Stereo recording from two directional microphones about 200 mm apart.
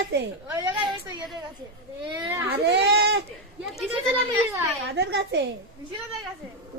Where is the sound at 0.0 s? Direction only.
55° right (ahead or behind).